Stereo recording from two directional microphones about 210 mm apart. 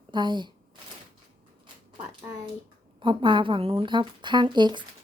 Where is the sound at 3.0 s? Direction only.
20° right (ahead or behind).